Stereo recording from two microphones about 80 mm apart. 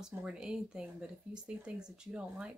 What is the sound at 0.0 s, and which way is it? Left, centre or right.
A woman's voice, centre.